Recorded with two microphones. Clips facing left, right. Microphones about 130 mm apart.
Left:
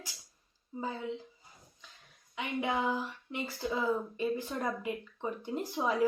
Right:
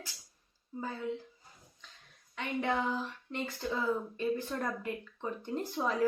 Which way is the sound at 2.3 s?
10° left (ahead or behind).